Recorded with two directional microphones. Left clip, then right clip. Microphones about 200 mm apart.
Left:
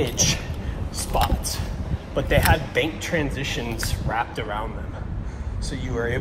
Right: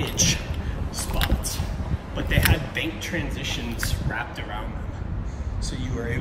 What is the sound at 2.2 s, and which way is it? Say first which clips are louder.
Speech: left 4 dB; 20° left (ahead or behind).